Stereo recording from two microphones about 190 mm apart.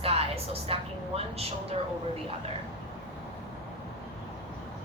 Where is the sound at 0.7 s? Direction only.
30° right (ahead or behind).